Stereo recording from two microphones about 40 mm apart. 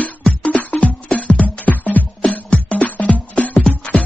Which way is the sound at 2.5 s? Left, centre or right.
Left.